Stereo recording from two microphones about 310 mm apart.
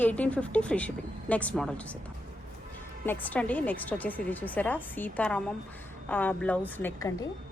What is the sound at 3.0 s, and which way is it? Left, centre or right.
A woman's voice, centre.